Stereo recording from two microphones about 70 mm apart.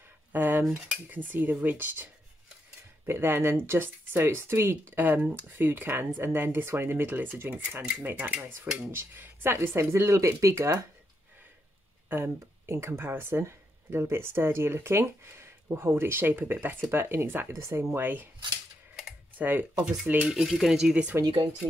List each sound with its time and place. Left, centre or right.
0.3 s cutlery: right
3.1 s speech: right
8.3 s cutlery: right
8.9 s speech: right
12.1 s speech: right
17.9 s cutlery: right
19.3 s speech: right
19.8 s speech: centre